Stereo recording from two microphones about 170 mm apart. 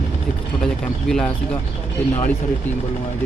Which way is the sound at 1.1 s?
5° left (ahead or behind).